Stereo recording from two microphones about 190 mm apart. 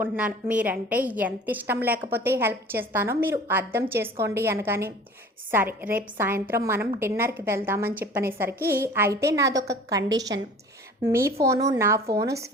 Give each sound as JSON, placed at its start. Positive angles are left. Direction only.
{"t": 0.0, "sound": "a woman's voice", "side_deg": -10}
{"t": 11.0, "sound": "a woman's voice", "side_deg": -15}